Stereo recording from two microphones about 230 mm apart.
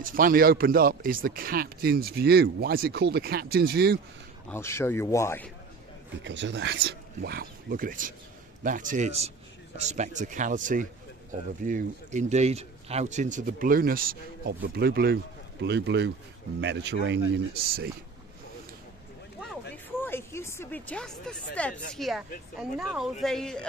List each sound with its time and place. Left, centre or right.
0.0 s speech: right
4.5 s speech: centre
6.2 s speech: right
20.0 s speech: centre